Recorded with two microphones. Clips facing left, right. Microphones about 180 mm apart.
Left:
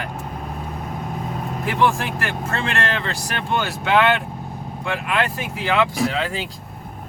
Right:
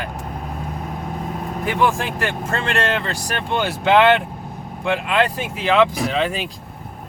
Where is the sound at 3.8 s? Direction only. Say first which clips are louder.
Right 5 dB; 20° right (ahead or behind).